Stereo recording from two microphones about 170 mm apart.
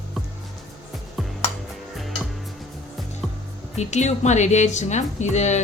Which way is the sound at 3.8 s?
45° left (ahead or behind).